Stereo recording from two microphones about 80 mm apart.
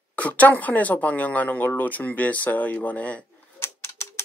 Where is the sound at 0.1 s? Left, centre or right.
Centre.